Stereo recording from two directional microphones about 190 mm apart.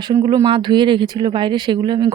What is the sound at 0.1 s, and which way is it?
Speech, 20° right (ahead or behind).